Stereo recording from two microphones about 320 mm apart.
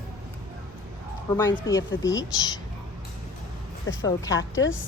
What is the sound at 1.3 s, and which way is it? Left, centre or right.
Speech, centre.